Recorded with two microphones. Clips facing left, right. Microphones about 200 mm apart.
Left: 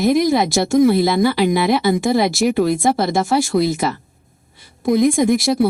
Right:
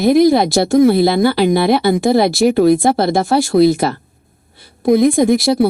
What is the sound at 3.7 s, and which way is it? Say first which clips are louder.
Speech: right 5 dB; 35° right (ahead or behind).